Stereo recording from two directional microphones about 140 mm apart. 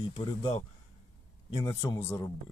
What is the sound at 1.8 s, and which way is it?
Speech, 20° left (ahead or behind).